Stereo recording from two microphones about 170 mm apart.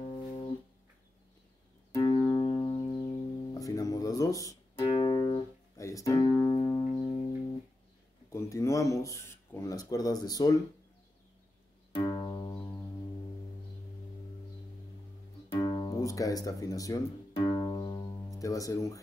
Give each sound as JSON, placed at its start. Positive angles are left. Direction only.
{"t": 0.0, "sound": "music", "side_deg": 30}
{"t": 2.0, "sound": "music", "side_deg": 30}
{"t": 3.5, "sound": "speech", "side_deg": 20}
{"t": 4.9, "sound": "music", "side_deg": 30}
{"t": 8.3, "sound": "speech", "side_deg": 15}
{"t": 12.0, "sound": "music", "side_deg": 25}
{"t": 15.5, "sound": "music", "side_deg": 30}